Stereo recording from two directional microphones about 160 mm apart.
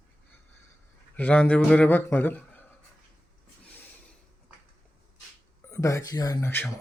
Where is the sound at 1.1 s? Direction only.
5° left (ahead or behind).